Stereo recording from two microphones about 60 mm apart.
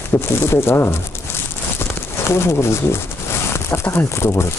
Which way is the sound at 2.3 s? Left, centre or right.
Left.